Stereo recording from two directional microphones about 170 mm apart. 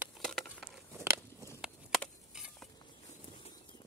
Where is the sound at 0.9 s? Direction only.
15° right (ahead or behind).